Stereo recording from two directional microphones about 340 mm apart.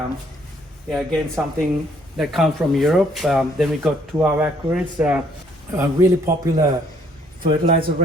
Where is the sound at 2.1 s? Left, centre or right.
Centre.